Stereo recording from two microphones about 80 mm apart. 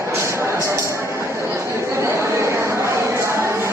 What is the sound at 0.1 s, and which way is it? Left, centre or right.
Music, right.